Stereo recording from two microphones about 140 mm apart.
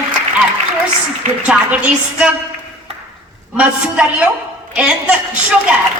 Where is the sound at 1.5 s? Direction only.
10° right (ahead or behind).